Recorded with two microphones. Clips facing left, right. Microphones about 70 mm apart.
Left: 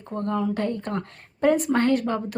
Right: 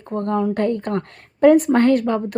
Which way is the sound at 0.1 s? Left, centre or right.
Right.